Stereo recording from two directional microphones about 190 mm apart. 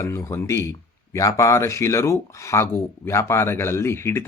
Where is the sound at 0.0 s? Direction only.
15° left (ahead or behind).